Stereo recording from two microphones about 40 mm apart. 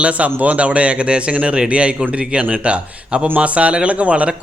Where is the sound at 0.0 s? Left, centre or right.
Right.